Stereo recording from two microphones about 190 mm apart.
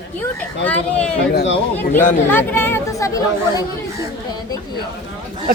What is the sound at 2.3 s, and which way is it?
Speech, 10° left (ahead or behind).